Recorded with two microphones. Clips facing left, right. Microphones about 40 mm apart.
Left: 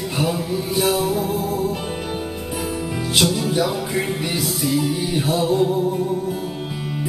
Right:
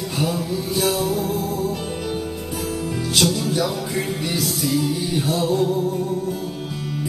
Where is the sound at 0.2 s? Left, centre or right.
Centre.